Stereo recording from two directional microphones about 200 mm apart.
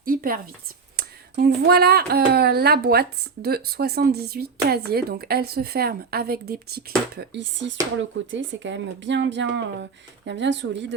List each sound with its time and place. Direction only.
0.0 s a woman's voice: 45° right (ahead or behind)
7.2 s speech: 65° right (ahead or behind)